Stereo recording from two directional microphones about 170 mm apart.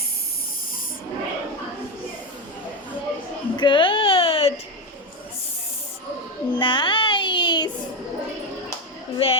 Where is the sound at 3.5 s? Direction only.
30° left (ahead or behind).